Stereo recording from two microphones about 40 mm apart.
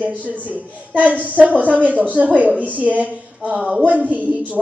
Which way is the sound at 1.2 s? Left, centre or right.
Right.